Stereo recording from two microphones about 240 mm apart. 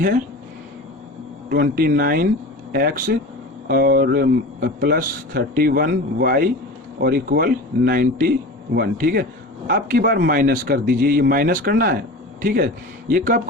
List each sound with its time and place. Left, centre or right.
1.5 s a man's voice: right